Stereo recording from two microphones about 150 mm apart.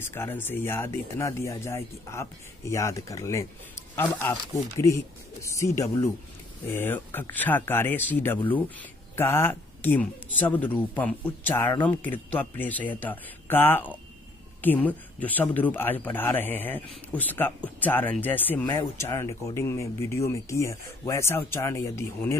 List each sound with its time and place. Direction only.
0.0 s speech: 15° left (ahead or behind)